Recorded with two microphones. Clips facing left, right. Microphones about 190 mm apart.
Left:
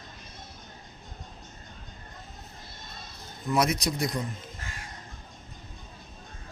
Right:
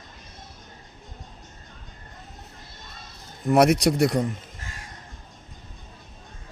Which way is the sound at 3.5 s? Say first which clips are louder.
Right 8 dB; 70° right (ahead or behind).